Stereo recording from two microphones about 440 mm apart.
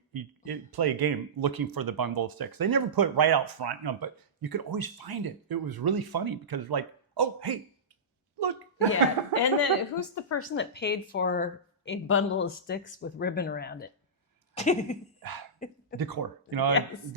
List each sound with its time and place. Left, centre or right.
0.1 s speech: right
8.4 s a sound: right
9.3 s speech: left
10.2 s speech: left
14.5 s a sound: centre
16.0 s speech: right